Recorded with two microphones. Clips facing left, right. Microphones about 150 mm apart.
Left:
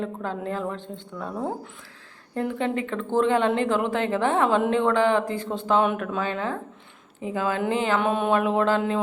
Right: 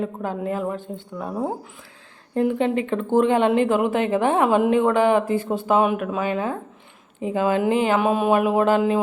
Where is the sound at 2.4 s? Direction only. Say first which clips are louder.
Right 5 dB; 20° right (ahead or behind).